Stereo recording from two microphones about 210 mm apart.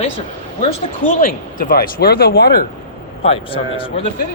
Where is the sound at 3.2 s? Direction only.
25° left (ahead or behind).